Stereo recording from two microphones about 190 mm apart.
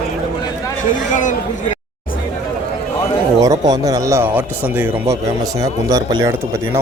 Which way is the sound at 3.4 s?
20° right (ahead or behind).